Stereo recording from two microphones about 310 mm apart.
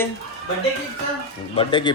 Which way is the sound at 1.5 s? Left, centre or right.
Centre.